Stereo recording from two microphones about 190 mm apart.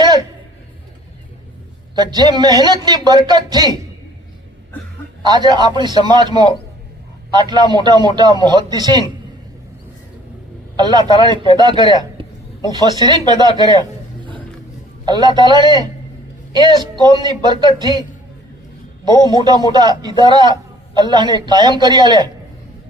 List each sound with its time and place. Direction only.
0.0 s a sound: 20° right (ahead or behind)
2.0 s a man's voice: 20° right (ahead or behind)
5.2 s a man's voice: 20° right (ahead or behind)
7.7 s a man's voice: 20° right (ahead or behind)
10.8 s a man's voice: 20° right (ahead or behind)
15.0 s a man's voice: 20° right (ahead or behind)
19.0 s a man's voice: 20° right (ahead or behind)